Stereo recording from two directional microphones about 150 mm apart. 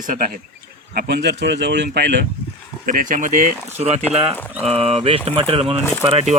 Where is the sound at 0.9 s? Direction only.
90° right.